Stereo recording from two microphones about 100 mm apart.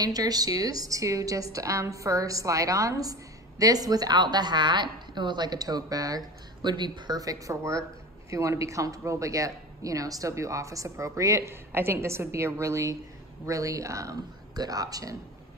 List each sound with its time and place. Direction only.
0.0 s a woman's voice: 40° right (ahead or behind)